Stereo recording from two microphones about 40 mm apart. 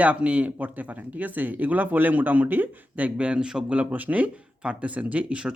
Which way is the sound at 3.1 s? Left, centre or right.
Right.